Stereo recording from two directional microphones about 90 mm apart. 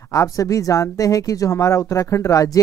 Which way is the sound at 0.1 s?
40° left (ahead or behind).